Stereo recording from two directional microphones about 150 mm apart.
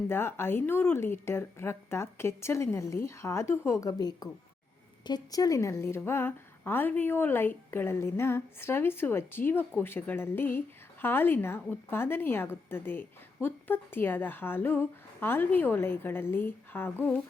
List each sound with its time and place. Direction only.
0.1 s a woman's voice: 15° left (ahead or behind)